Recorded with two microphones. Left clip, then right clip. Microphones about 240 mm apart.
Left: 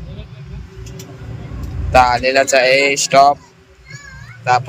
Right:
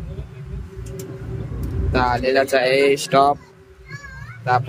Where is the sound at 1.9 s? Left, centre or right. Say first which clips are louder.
Left 8 dB; centre.